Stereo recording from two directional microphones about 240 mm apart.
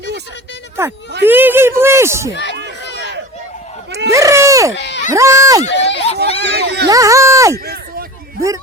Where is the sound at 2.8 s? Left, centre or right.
Left.